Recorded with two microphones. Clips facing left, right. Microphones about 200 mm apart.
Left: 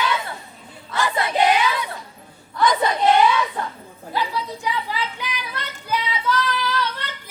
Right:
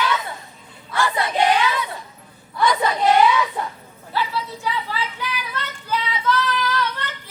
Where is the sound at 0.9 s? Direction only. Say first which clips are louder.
Even; 20° left (ahead or behind).